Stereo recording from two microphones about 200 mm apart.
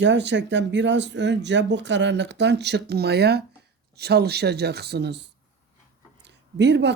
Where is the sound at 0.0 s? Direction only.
60° right (ahead or behind).